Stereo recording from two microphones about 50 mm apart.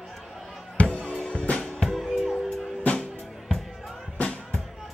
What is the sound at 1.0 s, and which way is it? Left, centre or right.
Music, left.